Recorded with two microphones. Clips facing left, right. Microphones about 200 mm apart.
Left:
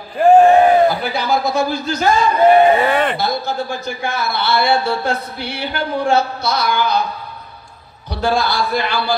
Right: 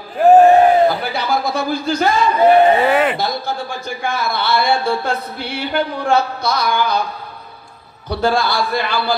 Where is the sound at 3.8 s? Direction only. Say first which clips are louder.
Even; 50° right (ahead or behind).